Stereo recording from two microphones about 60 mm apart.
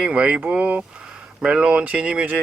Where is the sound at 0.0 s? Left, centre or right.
Centre.